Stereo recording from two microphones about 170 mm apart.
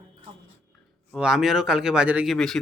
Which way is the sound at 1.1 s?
5° right (ahead or behind).